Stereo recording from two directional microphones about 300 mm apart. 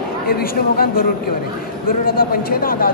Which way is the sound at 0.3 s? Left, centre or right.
Left.